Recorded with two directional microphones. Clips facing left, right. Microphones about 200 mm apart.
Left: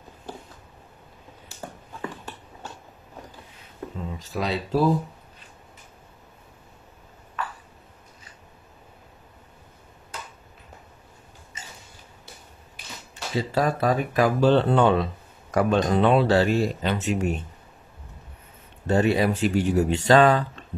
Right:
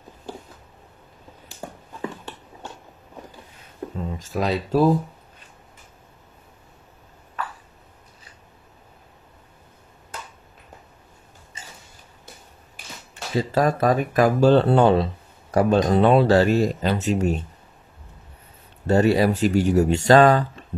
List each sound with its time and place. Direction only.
4.2 s speech: 45° right (ahead or behind)
13.1 s speech: 45° right (ahead or behind)
18.9 s speech: 40° right (ahead or behind)